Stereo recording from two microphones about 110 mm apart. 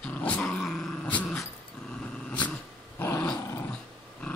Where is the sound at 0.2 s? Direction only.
10° left (ahead or behind).